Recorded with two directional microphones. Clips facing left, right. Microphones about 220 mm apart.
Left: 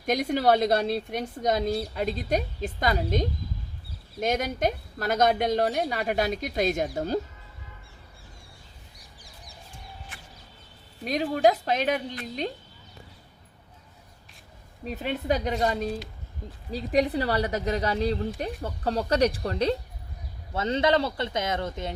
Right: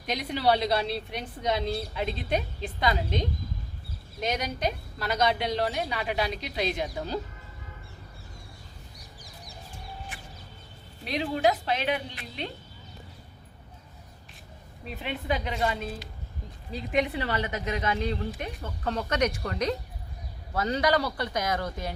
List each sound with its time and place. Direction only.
0.0 s a woman's voice: 50° left (ahead or behind)
11.0 s a woman's voice: 45° left (ahead or behind)
14.8 s speech: 40° left (ahead or behind); by 21.9 s 25° left (ahead or behind)